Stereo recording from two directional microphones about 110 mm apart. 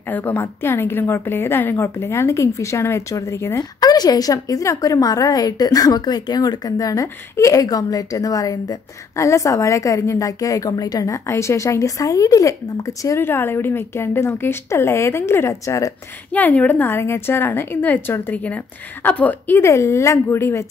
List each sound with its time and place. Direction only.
0.1 s a woman's voice: 15° left (ahead or behind)
3.8 s a woman's voice: 35° left (ahead or behind)
16.3 s a woman's voice: 15° left (ahead or behind)